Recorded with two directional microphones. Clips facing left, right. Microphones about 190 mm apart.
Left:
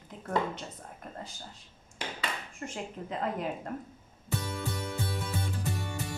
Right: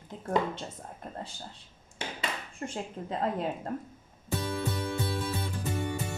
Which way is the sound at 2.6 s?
35° right (ahead or behind).